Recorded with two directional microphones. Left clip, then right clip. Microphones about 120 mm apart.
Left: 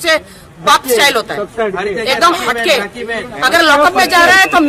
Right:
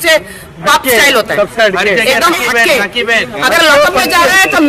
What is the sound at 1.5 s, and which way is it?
Speech, 35° right (ahead or behind).